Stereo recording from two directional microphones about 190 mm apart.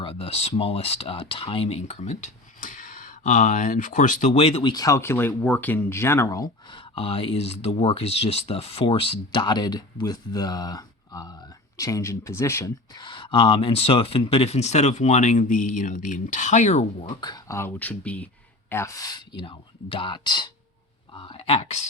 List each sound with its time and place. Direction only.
0.0 s speech: 30° left (ahead or behind)
4.7 s speech: 20° left (ahead or behind); by 17.1 s 35° left (ahead or behind)
17.1 s speech: 20° left (ahead or behind)